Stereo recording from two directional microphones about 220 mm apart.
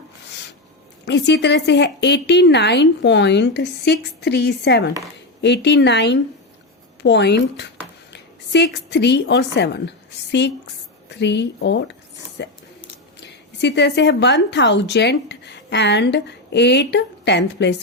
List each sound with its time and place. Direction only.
1.0 s a woman's voice: 50° left (ahead or behind)